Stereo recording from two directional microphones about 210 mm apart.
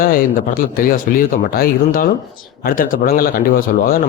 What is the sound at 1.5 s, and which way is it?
A man's voice, 45° left (ahead or behind).